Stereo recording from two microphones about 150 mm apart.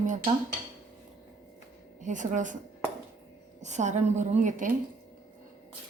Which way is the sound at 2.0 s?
55° right (ahead or behind).